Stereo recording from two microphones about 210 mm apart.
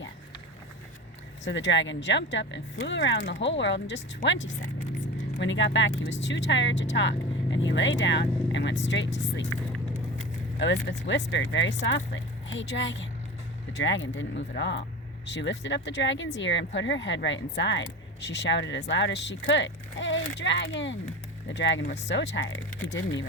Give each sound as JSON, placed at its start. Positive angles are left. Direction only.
{"t": 1.5, "sound": "speech", "side_deg": 60}
{"t": 10.6, "sound": "speech", "side_deg": 55}